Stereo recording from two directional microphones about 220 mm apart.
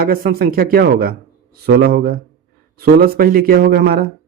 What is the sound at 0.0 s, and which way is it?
Speech, 40° right (ahead or behind).